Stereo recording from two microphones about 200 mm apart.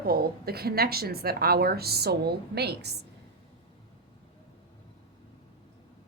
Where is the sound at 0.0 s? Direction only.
50° right (ahead or behind).